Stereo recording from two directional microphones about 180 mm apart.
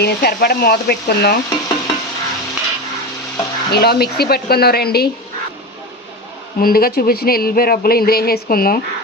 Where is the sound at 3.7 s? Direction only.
60° left (ahead or behind).